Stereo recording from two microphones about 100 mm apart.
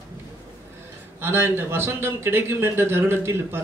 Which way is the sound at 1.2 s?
25° right (ahead or behind).